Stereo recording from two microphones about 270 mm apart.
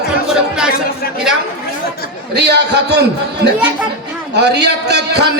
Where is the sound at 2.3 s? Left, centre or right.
Right.